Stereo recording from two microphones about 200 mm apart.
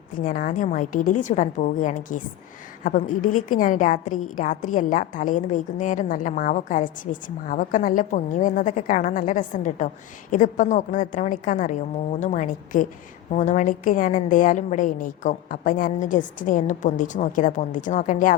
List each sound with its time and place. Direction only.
0.2 s a woman's voice: 40° left (ahead or behind)